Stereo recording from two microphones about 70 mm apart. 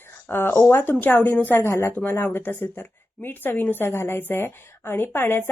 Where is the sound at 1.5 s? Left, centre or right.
Left.